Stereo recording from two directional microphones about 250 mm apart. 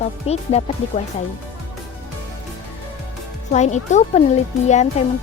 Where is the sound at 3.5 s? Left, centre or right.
Left.